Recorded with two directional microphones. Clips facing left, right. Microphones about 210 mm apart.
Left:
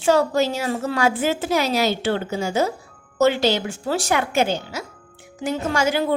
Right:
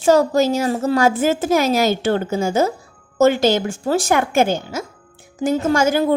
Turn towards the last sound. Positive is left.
turn(degrees=-45)  # may be behind; listen again after turning